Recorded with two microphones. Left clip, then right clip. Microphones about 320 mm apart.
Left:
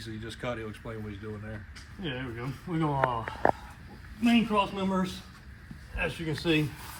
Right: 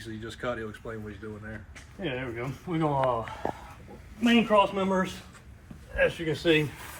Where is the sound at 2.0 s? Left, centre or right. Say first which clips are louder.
Right 4 dB; centre.